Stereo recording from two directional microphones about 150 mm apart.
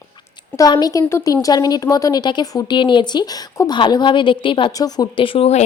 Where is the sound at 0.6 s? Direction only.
25° left (ahead or behind).